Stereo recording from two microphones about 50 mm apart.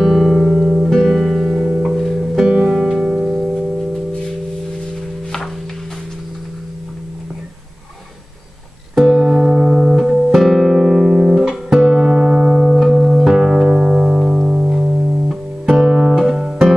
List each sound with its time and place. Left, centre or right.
0.0 s guitar: centre
0.8 s music: centre
2.5 s music: centre
3.0 s music: right
9.0 s music: centre
14.9 s music: right
15.6 s music: centre
16.3 s guitar: centre